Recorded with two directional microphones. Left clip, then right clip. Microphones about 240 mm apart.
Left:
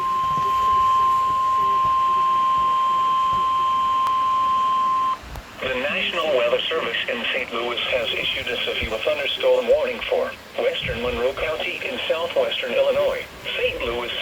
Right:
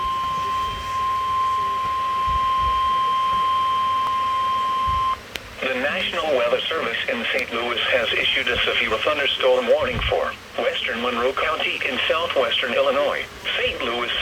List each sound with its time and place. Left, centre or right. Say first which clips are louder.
6.3 s radio: even; centre
7.9 s speech: right 5 dB; right
12.0 s speech: even; right